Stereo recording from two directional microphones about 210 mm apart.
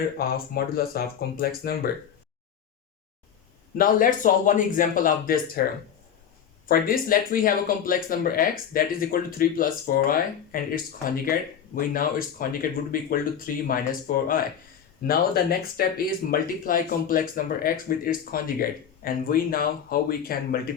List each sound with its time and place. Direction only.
0.2 s speech: 45° left (ahead or behind)
3.8 s speech: 40° left (ahead or behind)
6.7 s speech: 45° left (ahead or behind)